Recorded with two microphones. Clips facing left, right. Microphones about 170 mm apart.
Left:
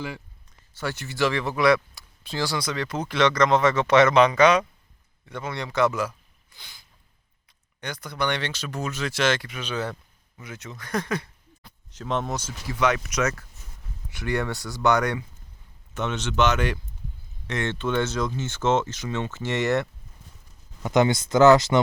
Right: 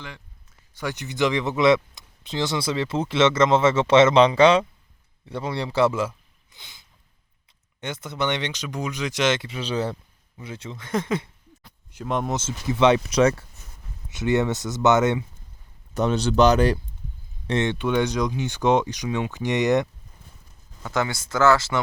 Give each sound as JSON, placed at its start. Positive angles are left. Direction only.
{"t": 0.7, "sound": "speech", "side_deg": -15}
{"t": 11.9, "sound": "speech", "side_deg": -10}
{"t": 12.3, "sound": "speech", "side_deg": -20}
{"t": 16.0, "sound": "speech", "side_deg": -35}
{"t": 17.4, "sound": "a sound", "side_deg": -30}
{"t": 17.7, "sound": "speech", "side_deg": -15}
{"t": 20.8, "sound": "speech", "side_deg": 20}